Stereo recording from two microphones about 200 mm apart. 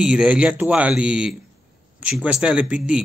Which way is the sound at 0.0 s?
5° right (ahead or behind).